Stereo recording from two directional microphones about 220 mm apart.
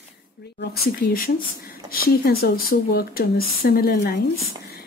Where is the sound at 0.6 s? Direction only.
45° left (ahead or behind).